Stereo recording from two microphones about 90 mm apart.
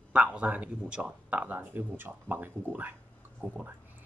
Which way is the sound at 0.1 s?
15° right (ahead or behind).